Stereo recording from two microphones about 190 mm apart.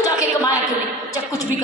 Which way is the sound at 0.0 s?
15° left (ahead or behind).